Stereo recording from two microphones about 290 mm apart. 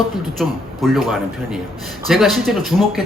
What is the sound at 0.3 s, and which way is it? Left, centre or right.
Speech, centre.